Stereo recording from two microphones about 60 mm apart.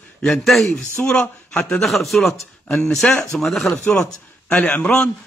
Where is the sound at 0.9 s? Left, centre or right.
Left.